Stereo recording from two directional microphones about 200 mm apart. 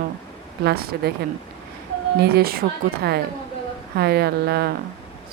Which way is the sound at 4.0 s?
55° right (ahead or behind).